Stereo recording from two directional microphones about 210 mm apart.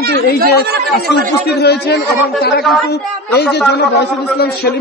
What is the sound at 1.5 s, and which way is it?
Speech, 50° left (ahead or behind).